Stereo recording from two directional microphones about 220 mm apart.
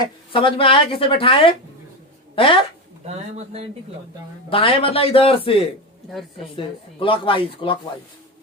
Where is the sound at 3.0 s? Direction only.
30° right (ahead or behind).